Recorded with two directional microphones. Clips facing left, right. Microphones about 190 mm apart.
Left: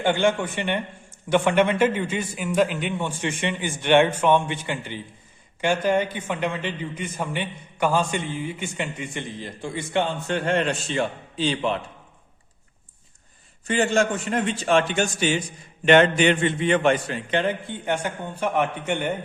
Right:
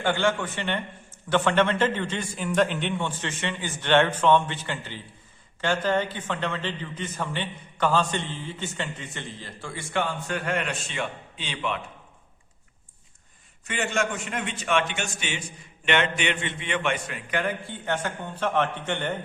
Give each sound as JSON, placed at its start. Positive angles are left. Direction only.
{"t": 0.0, "sound": "a man's voice", "side_deg": 15}
{"t": 13.7, "sound": "a man's voice", "side_deg": 35}